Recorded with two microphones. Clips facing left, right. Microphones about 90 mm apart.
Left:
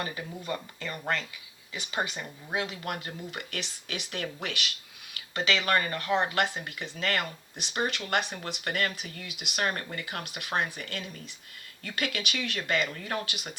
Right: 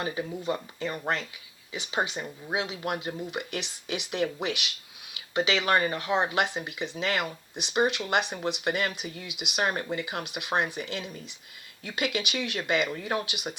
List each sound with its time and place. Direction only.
0.0 s speech: 20° right (ahead or behind)